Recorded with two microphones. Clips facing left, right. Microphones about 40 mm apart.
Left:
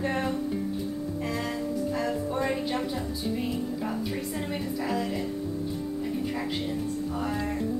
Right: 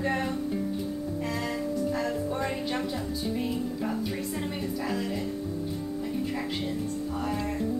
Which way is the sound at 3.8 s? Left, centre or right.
Centre.